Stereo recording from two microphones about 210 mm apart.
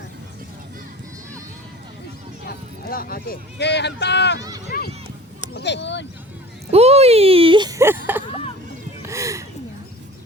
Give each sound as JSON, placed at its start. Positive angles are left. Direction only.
{"t": 2.5, "sound": "speech", "side_deg": 45}
{"t": 4.4, "sound": "speech", "side_deg": -20}
{"t": 5.5, "sound": "speech", "side_deg": 55}
{"t": 6.7, "sound": "a sound", "side_deg": -30}